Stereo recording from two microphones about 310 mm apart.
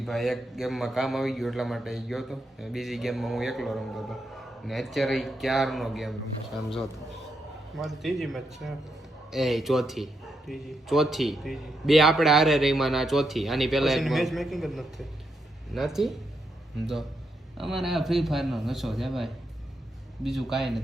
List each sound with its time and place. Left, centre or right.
0.0 s a man's voice: centre
7.8 s a man's voice: centre